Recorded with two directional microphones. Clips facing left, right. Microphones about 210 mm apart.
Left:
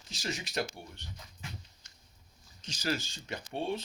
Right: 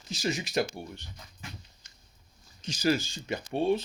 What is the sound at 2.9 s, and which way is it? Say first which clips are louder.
Speech: right 7 dB; 10° right (ahead or behind).